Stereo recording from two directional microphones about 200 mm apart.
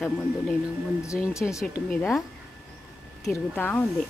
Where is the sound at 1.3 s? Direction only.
15° left (ahead or behind).